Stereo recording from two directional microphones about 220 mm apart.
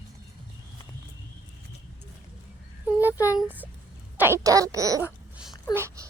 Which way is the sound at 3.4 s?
10° right (ahead or behind).